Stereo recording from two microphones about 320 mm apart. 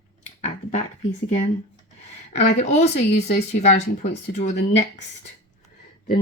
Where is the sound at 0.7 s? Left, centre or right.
Left.